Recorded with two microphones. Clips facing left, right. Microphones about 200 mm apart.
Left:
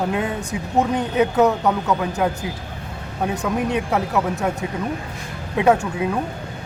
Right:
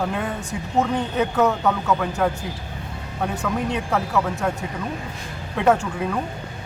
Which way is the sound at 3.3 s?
15° left (ahead or behind).